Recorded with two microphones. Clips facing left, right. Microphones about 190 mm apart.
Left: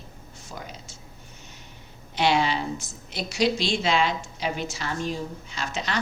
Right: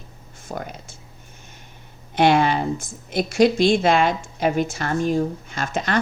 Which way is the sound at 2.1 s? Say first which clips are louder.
Right 6 dB; 55° right (ahead or behind).